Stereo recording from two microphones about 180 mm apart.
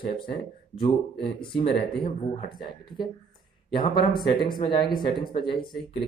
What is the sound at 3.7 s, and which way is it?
Speech, 25° left (ahead or behind).